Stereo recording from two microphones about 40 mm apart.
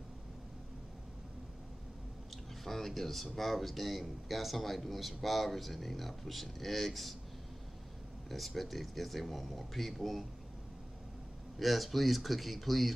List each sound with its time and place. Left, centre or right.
2.6 s speech: centre
8.3 s speech: centre
11.5 s speech: centre